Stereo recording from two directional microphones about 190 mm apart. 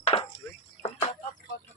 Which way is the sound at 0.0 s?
30° left (ahead or behind).